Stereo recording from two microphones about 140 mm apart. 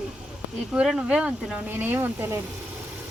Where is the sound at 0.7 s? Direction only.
5° right (ahead or behind).